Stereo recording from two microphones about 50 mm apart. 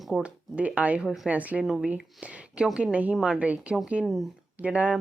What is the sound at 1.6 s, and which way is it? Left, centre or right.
Speech, centre.